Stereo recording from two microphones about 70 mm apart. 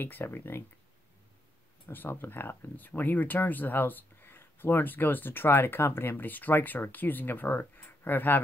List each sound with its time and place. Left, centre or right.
0.0 s speech: left
1.9 s speech: left